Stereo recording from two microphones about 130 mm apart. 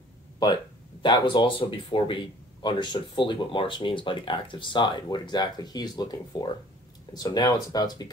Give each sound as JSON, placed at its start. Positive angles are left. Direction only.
{"t": 0.4, "sound": "speech", "side_deg": 35}